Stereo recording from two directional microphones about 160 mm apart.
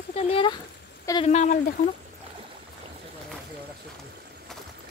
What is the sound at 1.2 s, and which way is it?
Speech, 45° left (ahead or behind).